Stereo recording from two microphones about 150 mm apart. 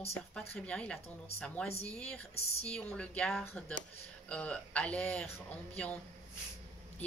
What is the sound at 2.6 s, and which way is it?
Speech, 5° left (ahead or behind).